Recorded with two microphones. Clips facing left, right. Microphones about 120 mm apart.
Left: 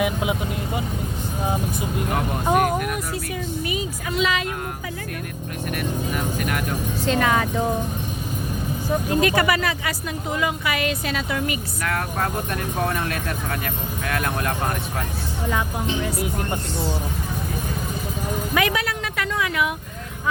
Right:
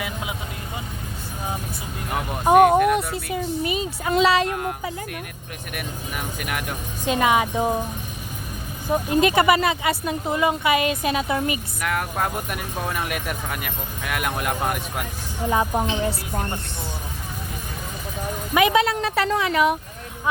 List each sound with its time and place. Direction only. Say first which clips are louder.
0.0 s speech: left 8 dB; 20° left (ahead or behind)
2.5 s speech: right 7 dB; 25° right (ahead or behind)
4.1 s speech: right 5 dB; 35° right (ahead or behind)
5.7 s speech: left 5 dB; 10° right (ahead or behind)
8.9 s speech: right 1 dB; 20° right (ahead or behind)
11.9 s speech: right 1 dB; 15° right (ahead or behind)
18.5 s speech: right 6 dB; 25° right (ahead or behind)